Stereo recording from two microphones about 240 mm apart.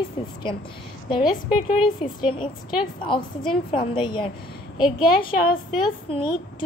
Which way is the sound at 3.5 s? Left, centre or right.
Centre.